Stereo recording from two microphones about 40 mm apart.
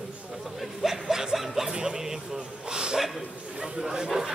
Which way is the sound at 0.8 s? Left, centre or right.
Centre.